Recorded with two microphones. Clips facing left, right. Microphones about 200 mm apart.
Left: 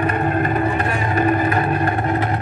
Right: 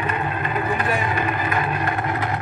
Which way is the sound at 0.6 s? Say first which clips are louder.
Left 2 dB; 35° left (ahead or behind).